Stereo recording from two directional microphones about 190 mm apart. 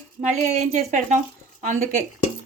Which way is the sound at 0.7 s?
40° right (ahead or behind).